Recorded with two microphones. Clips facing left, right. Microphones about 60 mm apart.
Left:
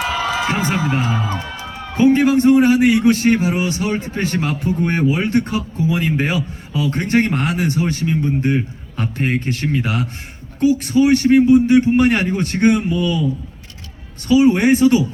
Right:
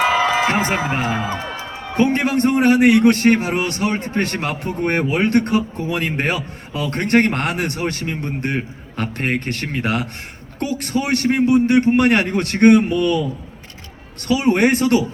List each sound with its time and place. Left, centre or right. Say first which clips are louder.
0.0 s music: right 4 dB; right
1.3 s music: even; centre
2.0 s a man's voice: left 4 dB; right